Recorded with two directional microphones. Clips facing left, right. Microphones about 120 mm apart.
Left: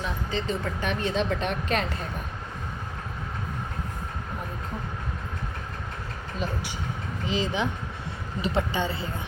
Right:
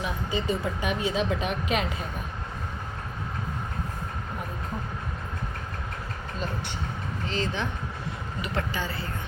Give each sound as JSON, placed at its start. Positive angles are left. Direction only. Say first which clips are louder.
{"t": 0.0, "sound": "speech", "louder": "right 1 dB", "side_deg": -10}
{"t": 7.3, "sound": "a woman's voice", "louder": "left 3 dB", "side_deg": 15}